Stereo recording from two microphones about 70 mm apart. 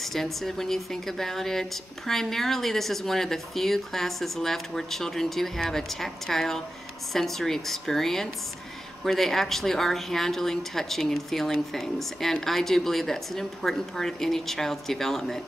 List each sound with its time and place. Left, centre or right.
0.0 s speech: centre